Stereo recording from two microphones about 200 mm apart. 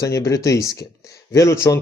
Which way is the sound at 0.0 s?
15° left (ahead or behind).